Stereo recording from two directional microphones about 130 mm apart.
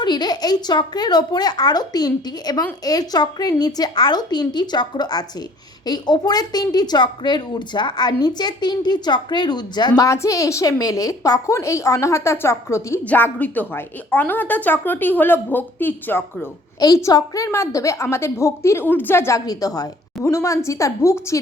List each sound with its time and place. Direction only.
0.0 s a woman's voice: 35° left (ahead or behind); by 16.5 s 15° left (ahead or behind)
16.8 s a woman's voice: 25° left (ahead or behind)